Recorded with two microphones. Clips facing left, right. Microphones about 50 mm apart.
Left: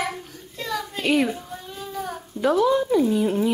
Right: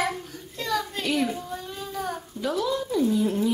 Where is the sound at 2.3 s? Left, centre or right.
Left.